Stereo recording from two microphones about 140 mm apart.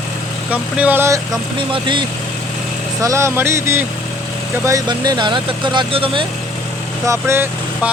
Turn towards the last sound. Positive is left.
turn(degrees=-20)  # may be behind; listen again after turning